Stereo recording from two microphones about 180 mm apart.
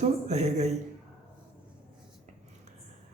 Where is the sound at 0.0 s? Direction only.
40° right (ahead or behind).